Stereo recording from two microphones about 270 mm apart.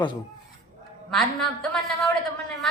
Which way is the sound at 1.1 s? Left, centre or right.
Centre.